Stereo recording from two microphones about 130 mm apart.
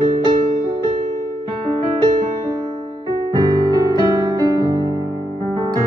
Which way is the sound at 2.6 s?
35° right (ahead or behind).